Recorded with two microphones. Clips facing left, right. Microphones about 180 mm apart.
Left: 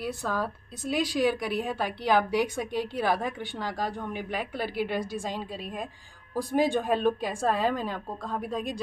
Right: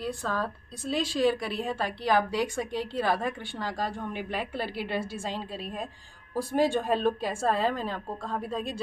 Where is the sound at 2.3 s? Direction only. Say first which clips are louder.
Left 2 dB; 20° left (ahead or behind).